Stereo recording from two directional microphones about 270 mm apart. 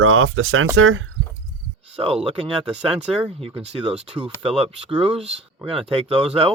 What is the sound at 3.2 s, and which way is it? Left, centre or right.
Speech, right.